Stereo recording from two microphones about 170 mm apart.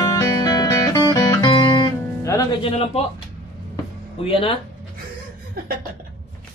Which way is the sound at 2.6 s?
35° left (ahead or behind).